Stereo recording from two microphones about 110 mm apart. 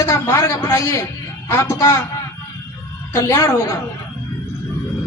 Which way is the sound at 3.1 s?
30° left (ahead or behind).